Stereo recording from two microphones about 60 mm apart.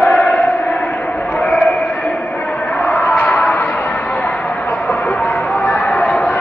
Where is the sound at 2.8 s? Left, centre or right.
Left.